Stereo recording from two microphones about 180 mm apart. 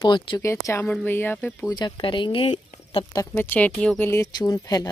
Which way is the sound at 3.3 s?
10° left (ahead or behind).